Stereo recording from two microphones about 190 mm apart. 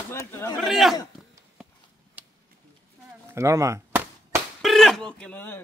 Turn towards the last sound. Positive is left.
turn(degrees=10)  # may be behind; listen again after turning